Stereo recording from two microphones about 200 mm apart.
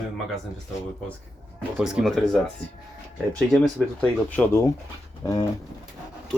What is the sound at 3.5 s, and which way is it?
Speech, 10° left (ahead or behind).